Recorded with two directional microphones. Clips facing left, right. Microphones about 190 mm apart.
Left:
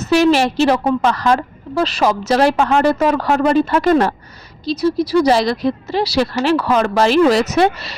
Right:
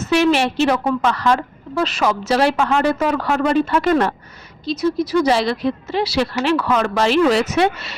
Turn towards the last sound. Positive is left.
turn(degrees=35)  # may be behind; listen again after turning